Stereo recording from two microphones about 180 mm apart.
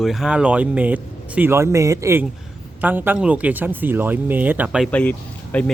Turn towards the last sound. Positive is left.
turn(degrees=10)  # may be behind; listen again after turning